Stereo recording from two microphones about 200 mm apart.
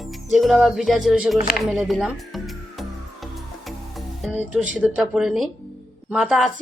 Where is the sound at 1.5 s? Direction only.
Centre (ahead or behind).